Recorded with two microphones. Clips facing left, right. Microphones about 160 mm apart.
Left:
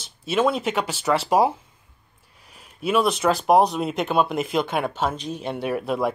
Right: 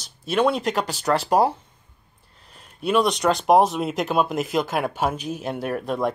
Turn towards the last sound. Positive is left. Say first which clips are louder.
# left 1 dB
turn(degrees=5)  # may be behind; listen again after turning